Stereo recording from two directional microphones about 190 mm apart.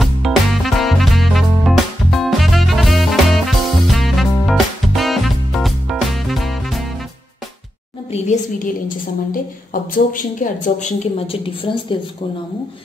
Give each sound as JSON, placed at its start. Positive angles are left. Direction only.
{"t": 0.0, "sound": "music", "side_deg": 0}
{"t": 8.1, "sound": "a woman's voice", "side_deg": 40}